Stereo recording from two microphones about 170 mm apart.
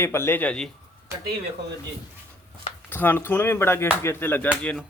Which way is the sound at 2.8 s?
10° left (ahead or behind).